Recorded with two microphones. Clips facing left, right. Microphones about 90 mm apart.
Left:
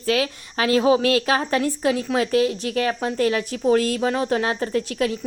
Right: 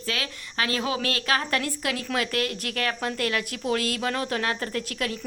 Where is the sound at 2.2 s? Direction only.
60° right (ahead or behind).